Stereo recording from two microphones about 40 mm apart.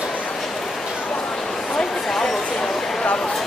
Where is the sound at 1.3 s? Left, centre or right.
Centre.